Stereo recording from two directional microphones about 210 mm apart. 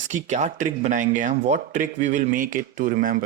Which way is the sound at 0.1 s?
35° right (ahead or behind).